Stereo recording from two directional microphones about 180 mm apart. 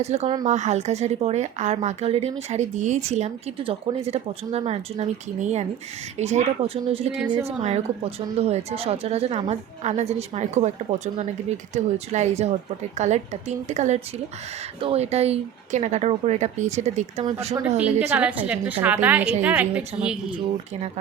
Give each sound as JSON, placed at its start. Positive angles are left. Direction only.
{"t": 0.0, "sound": "speech", "side_deg": -35}
{"t": 18.0, "sound": "a woman's voice", "side_deg": -10}